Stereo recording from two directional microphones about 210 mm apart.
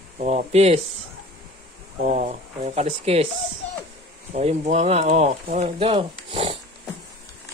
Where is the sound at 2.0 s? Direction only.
35° right (ahead or behind).